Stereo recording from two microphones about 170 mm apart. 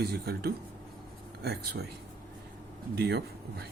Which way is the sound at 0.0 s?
70° right (ahead or behind).